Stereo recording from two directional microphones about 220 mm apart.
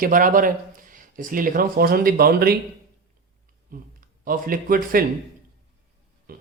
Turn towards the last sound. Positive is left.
turn(degrees=-45)  # may be behind; listen again after turning